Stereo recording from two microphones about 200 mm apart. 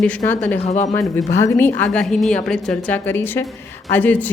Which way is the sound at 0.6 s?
35° left (ahead or behind).